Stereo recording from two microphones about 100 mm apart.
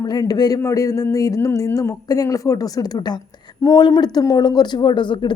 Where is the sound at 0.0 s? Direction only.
40° left (ahead or behind).